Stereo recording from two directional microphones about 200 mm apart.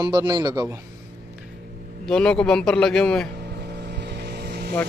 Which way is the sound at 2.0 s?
5° left (ahead or behind).